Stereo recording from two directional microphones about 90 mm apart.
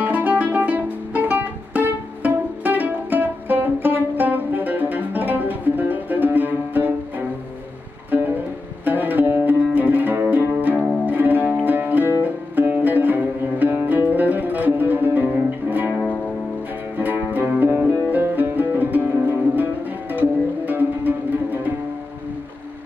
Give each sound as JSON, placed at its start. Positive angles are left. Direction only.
{"t": 0.0, "sound": "music", "side_deg": -20}
{"t": 8.8, "sound": "music", "side_deg": -20}